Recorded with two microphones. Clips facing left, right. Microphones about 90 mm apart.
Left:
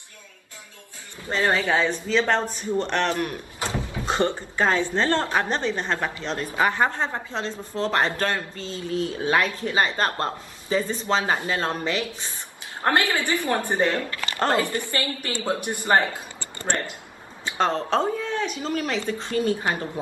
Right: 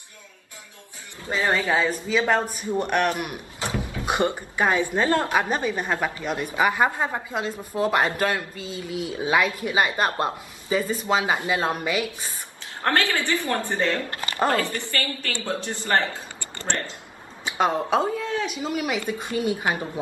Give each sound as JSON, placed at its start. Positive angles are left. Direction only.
{"t": 1.3, "sound": "speech", "side_deg": -5}
{"t": 12.8, "sound": "a woman's voice", "side_deg": 20}
{"t": 17.5, "sound": "speech", "side_deg": -10}